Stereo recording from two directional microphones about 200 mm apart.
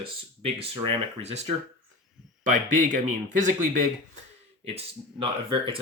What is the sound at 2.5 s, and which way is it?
Speech, 40° right (ahead or behind).